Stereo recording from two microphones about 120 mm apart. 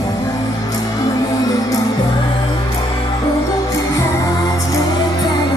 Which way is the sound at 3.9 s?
25° left (ahead or behind).